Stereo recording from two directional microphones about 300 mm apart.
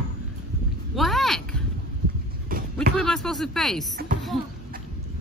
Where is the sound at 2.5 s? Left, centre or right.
Right.